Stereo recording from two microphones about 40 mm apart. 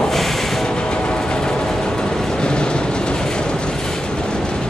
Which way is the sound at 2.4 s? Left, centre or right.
Left.